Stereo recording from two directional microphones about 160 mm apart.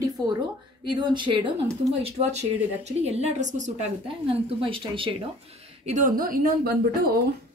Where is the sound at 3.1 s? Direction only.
45° right (ahead or behind).